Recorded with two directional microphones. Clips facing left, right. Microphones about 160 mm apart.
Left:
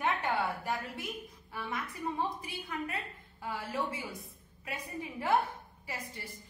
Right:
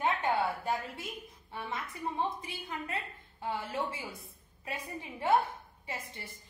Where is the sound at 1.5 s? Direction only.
25° right (ahead or behind).